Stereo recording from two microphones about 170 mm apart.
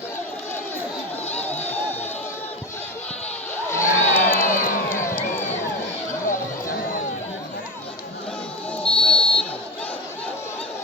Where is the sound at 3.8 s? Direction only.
55° left (ahead or behind).